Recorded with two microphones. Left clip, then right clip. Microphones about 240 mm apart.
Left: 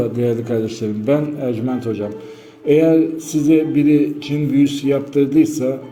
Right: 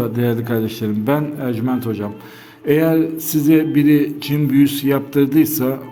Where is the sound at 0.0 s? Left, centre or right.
Right.